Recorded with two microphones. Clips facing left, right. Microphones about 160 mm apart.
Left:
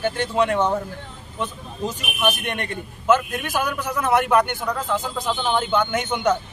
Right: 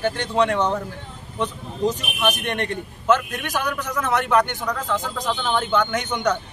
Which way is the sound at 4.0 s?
10° left (ahead or behind).